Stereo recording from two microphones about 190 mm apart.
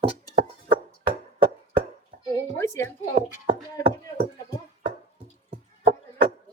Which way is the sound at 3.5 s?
45° right (ahead or behind).